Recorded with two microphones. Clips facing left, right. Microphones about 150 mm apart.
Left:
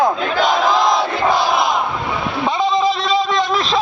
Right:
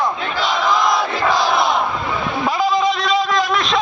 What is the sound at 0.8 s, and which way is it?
Crowd, 20° left (ahead or behind).